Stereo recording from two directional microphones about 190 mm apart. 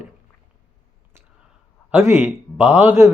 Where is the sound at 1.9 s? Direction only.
15° right (ahead or behind).